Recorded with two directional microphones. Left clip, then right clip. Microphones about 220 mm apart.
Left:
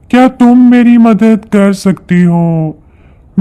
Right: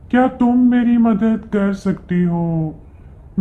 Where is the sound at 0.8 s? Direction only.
90° left.